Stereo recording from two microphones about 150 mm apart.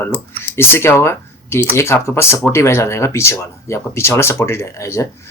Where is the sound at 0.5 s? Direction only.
15° left (ahead or behind).